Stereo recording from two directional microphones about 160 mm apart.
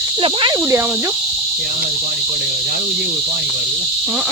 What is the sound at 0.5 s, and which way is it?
Cricket, 15° right (ahead or behind).